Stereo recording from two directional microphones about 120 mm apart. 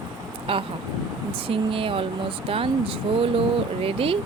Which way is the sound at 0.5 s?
50° right (ahead or behind).